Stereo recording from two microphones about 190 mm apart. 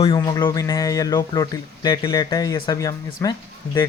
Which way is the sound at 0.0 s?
25° left (ahead or behind).